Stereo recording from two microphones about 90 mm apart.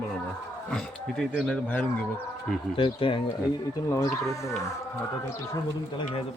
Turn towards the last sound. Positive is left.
turn(degrees=35)  # may be behind; listen again after turning